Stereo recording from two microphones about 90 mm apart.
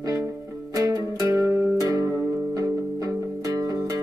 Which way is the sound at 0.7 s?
40° right (ahead or behind).